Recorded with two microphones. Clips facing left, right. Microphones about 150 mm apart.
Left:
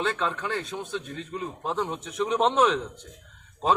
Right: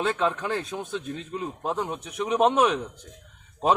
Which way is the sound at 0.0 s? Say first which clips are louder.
Right 3 dB; 15° right (ahead or behind).